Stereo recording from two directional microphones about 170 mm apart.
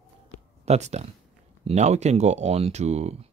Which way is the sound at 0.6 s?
40° right (ahead or behind).